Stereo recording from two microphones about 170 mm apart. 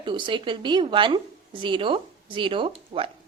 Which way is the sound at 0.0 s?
30° right (ahead or behind).